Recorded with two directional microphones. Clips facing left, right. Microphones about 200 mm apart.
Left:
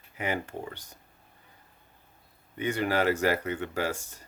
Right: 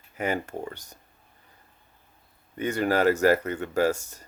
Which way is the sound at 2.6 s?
45° right (ahead or behind).